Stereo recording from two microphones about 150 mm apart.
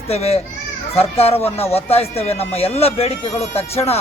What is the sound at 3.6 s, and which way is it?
Speech, 45° left (ahead or behind).